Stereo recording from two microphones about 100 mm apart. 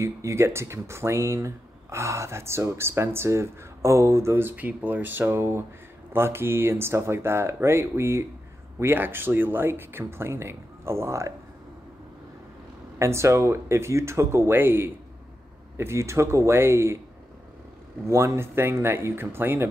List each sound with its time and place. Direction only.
0.0 s speech: 30° right (ahead or behind)
13.0 s speech: 30° right (ahead or behind)
18.0 s speech: 30° right (ahead or behind)